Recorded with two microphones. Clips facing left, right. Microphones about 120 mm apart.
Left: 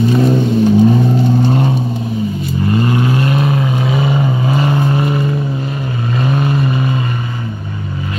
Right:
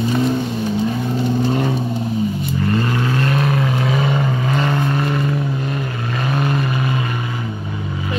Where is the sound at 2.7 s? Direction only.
15° left (ahead or behind); by 7.0 s centre (ahead or behind).